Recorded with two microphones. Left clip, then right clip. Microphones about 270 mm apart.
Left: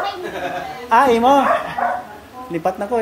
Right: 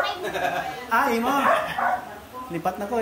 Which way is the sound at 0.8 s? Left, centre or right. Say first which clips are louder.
Left 10 dB; centre.